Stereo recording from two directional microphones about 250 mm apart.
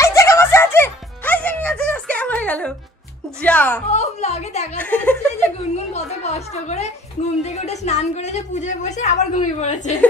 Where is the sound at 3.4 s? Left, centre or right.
Centre.